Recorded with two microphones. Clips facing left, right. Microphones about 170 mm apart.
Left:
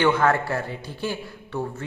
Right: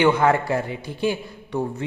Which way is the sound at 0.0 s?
15° right (ahead or behind).